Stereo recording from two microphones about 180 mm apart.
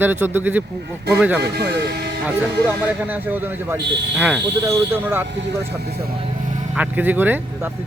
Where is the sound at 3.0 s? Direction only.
10° right (ahead or behind).